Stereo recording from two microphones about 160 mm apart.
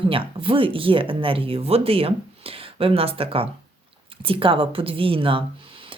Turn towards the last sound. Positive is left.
turn(degrees=-35)  # may be behind; listen again after turning